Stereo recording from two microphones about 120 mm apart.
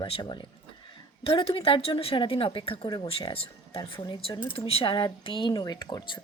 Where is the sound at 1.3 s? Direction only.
50° left (ahead or behind).